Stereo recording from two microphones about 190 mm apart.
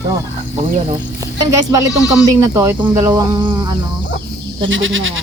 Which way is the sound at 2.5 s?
20° right (ahead or behind).